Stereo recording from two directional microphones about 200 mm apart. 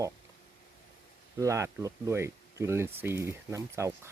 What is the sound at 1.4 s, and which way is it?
Speech, 15° right (ahead or behind).